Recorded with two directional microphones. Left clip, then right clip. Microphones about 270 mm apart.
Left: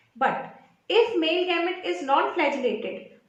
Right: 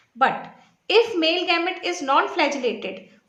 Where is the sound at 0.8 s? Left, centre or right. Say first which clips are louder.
Right 3 dB; right.